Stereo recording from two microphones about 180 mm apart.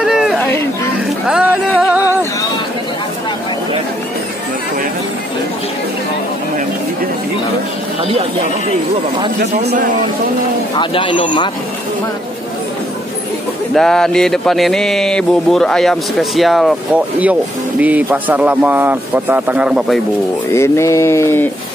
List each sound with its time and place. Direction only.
0.0 s a sound: 5° right (ahead or behind)
1.2 s music: 5° right (ahead or behind)
9.7 s a man's voice: 50° right (ahead or behind)
10.8 s speech: 25° left (ahead or behind)
13.7 s speech: centre (ahead or behind)
20.5 s mantra: 15° left (ahead or behind)